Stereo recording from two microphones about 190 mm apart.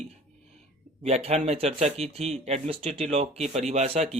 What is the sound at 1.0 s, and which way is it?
Speech, 35° right (ahead or behind).